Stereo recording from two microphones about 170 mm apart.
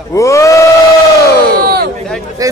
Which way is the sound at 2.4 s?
20° right (ahead or behind).